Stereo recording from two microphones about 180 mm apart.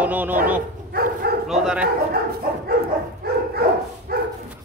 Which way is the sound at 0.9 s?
55° right (ahead or behind).